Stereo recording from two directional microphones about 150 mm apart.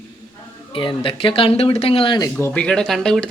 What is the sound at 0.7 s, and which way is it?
Speech, 35° left (ahead or behind).